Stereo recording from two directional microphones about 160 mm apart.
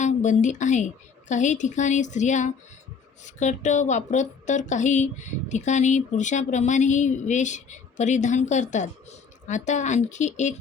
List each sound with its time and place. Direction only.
0.0 s speech: 50° left (ahead or behind)